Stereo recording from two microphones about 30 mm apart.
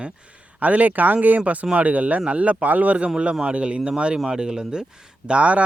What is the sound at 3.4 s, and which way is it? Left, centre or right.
Speech, right.